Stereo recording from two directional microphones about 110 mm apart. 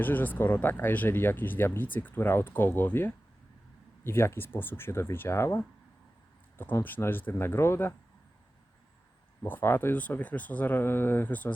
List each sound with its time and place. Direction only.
0.0 s speech: 15° left (ahead or behind)
9.4 s speech: 20° left (ahead or behind)